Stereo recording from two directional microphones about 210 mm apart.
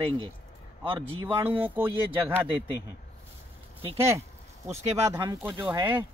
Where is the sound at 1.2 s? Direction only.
10° right (ahead or behind).